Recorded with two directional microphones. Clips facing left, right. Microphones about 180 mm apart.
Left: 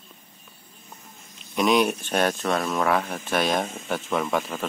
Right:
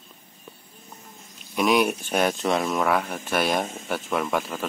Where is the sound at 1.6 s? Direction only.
5° right (ahead or behind).